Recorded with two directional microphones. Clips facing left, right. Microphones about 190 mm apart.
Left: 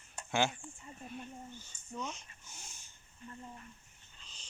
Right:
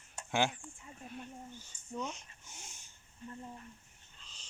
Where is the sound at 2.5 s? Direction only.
25° right (ahead or behind).